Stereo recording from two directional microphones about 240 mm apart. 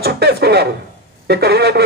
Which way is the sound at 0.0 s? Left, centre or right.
Right.